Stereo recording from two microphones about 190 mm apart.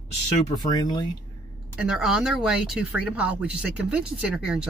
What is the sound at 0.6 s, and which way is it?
Speech, 20° left (ahead or behind).